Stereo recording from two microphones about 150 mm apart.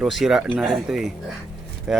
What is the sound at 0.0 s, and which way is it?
Speech, centre (ahead or behind).